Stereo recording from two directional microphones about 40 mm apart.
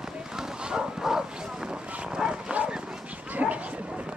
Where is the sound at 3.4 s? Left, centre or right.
Right.